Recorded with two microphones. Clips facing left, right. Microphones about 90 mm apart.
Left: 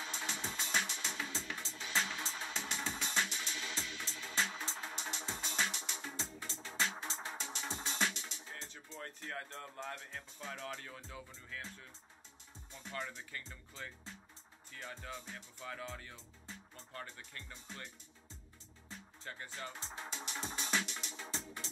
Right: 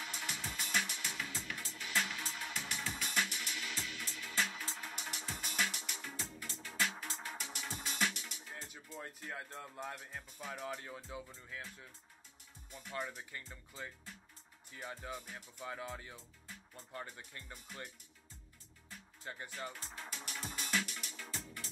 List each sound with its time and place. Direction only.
0.0 s music: 25° left (ahead or behind)
8.5 s music: 15° right (ahead or behind)
8.9 s speech: 15° right (ahead or behind)
12.9 s speech: 15° right (ahead or behind)
19.3 s speech: 20° right (ahead or behind)
19.7 s music: 20° left (ahead or behind)